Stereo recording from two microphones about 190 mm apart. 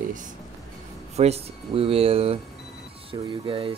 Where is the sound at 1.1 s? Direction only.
35° right (ahead or behind).